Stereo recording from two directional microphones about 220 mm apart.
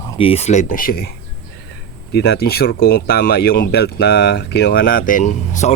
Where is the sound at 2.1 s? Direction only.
50° left (ahead or behind).